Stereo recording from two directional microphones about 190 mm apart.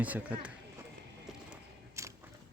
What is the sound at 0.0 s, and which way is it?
Speech, 10° right (ahead or behind).